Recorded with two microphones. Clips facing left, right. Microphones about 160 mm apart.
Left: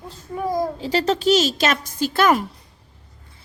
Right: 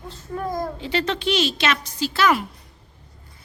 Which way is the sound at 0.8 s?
40° left (ahead or behind).